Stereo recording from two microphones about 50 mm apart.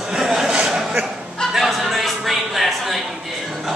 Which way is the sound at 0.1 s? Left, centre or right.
Centre.